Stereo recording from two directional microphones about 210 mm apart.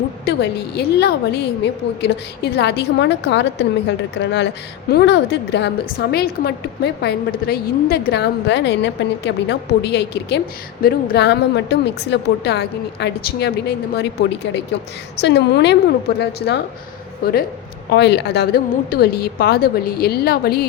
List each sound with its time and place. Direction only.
0.3 s a woman's voice: 50° left (ahead or behind)
15.2 s a woman's voice: 55° left (ahead or behind)